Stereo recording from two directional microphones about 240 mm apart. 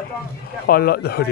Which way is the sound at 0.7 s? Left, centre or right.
Left.